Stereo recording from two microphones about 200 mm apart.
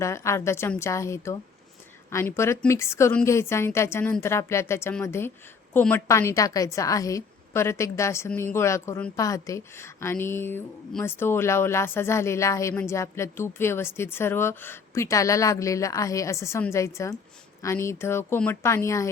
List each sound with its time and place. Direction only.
0.0 s a woman's voice: 15° left (ahead or behind)